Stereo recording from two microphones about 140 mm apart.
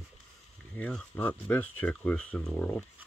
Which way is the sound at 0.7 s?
10° left (ahead or behind).